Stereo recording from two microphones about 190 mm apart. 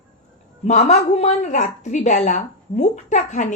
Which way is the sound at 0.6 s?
35° left (ahead or behind).